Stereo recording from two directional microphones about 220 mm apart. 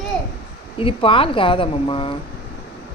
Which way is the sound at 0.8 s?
25° left (ahead or behind).